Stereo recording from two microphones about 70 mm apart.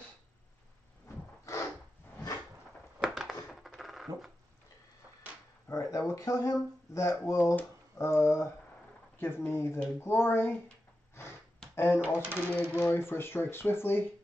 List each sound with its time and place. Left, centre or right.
1.0 s rub: left
3.0 s a sound: centre
3.4 s coin: centre
5.7 s speech: left
8.0 s speech: left
11.7 s speech: left
12.3 s speech: right
12.7 s speech: left